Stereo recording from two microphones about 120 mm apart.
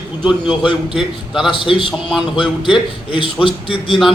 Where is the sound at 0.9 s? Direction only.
5° right (ahead or behind).